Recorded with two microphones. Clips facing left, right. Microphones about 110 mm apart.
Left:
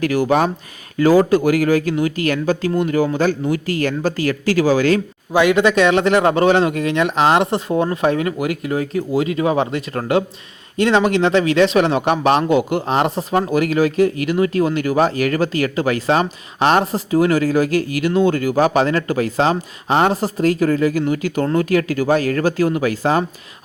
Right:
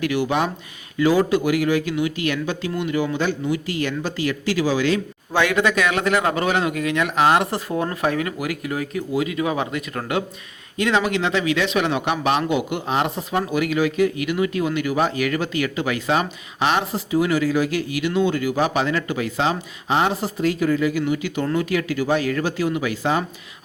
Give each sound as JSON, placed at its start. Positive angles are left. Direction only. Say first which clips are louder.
{"t": 0.0, "sound": "speech", "louder": "left 5 dB", "side_deg": 40}
{"t": 5.3, "sound": "speech", "louder": "left 5 dB", "side_deg": 20}